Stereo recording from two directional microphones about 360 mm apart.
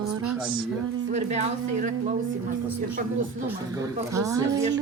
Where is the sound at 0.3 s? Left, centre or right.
Centre.